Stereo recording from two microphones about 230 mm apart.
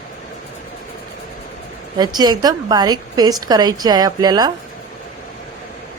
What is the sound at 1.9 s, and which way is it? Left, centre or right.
A woman's voice, centre.